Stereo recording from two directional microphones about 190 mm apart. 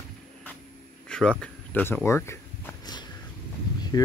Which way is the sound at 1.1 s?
5° left (ahead or behind).